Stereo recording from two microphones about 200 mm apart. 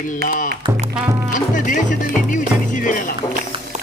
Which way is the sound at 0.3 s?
40° left (ahead or behind).